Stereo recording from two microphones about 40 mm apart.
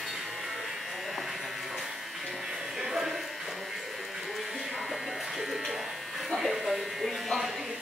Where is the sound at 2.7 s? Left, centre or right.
Centre.